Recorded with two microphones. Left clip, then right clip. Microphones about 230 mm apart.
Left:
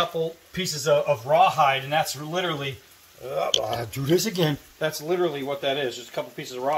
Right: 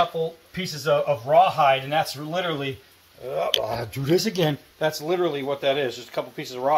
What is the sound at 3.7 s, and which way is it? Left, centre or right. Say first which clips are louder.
Speech: right 1 dB; centre.